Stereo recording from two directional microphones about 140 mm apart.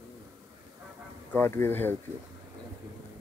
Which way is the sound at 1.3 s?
15° left (ahead or behind).